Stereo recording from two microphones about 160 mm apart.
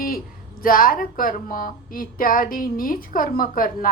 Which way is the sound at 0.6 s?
65° left (ahead or behind).